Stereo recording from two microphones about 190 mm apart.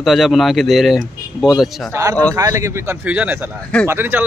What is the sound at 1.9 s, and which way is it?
Speech, 15° right (ahead or behind).